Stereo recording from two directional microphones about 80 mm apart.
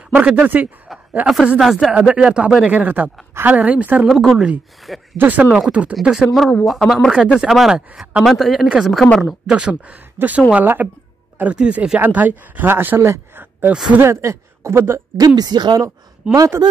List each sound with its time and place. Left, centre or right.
0.1 s speech: centre
1.9 s speech: centre
4.1 s speech: centre
5.1 s speech: right
5.9 s speech: centre; by 15.0 s right
15.1 s speech: right
16.3 s speech: right